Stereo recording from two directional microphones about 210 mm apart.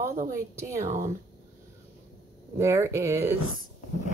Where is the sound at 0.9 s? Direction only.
35° right (ahead or behind).